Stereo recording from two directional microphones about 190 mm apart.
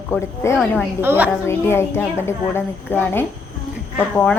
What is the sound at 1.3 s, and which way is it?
A woman's voice, 15° left (ahead or behind).